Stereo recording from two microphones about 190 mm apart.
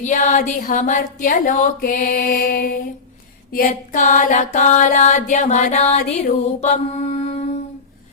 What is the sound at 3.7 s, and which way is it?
Music, 40° left (ahead or behind).